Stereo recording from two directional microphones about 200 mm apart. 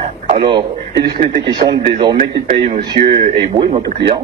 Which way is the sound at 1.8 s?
25° right (ahead or behind).